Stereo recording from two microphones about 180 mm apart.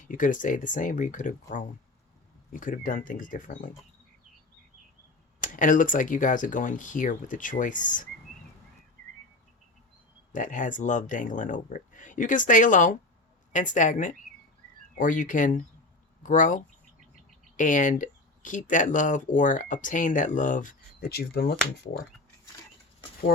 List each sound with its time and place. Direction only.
0.0 s speech: 45° left (ahead or behind)
5.4 s speech: 45° left (ahead or behind)
10.3 s speech: 45° left (ahead or behind); by 21.5 s 60° left (ahead or behind)